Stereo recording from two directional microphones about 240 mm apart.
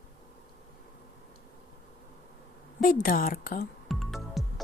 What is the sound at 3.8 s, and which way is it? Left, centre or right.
Music, centre.